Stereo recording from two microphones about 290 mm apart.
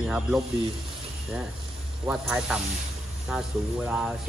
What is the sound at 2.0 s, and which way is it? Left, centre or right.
Speech, centre.